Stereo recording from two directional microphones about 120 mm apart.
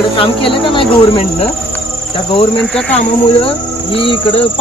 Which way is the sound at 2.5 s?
5° left (ahead or behind).